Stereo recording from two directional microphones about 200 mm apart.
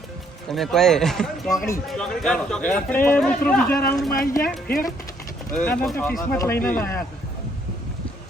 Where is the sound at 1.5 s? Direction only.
15° left (ahead or behind).